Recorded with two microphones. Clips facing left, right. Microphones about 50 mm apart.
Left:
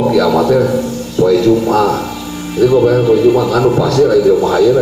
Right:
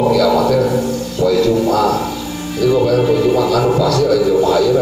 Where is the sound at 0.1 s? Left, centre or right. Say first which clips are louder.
Left 2 dB; left.